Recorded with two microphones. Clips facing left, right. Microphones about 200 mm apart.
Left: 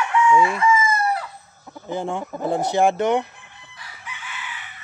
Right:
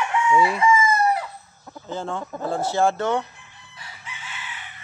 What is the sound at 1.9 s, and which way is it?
Speech, 15° left (ahead or behind).